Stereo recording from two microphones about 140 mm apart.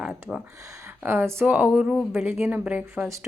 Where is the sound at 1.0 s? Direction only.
15° right (ahead or behind).